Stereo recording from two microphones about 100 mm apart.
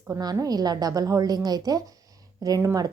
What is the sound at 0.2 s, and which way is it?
A woman's voice, 40° right (ahead or behind).